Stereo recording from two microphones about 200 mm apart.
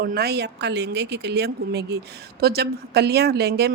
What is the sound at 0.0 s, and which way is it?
A woman's voice, 50° right (ahead or behind).